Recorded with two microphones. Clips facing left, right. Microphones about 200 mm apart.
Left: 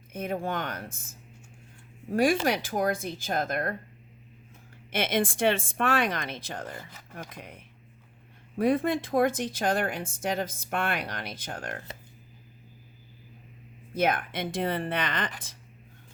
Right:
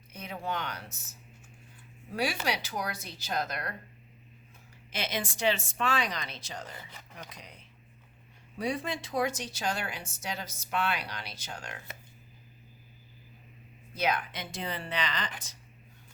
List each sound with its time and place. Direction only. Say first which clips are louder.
0.1 s speech: left 6 dB; 50° left (ahead or behind)
2.0 s speech: left 8 dB; 50° left (ahead or behind)
4.9 s speech: left 8 dB; 55° left (ahead or behind)
13.9 s speech: left 4 dB; 55° left (ahead or behind)